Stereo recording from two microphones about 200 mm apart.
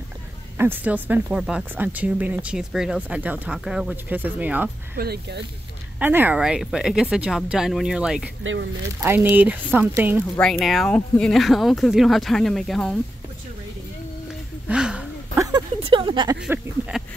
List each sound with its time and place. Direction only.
0.6 s speech: 10° right (ahead or behind)
4.9 s speech: 50° right (ahead or behind)
5.9 s speech: 10° right (ahead or behind)
14.7 s a sound: 5° right (ahead or behind)
15.3 s a sound: 15° right (ahead or behind)
15.8 s speech: 25° right (ahead or behind)